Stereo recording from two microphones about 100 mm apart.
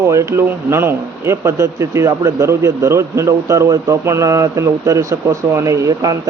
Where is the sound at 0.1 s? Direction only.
30° right (ahead or behind).